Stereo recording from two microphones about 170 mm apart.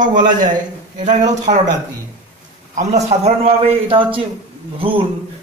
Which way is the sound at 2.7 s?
40° right (ahead or behind).